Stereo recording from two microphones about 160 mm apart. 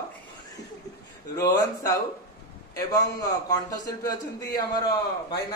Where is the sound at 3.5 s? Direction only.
25° left (ahead or behind).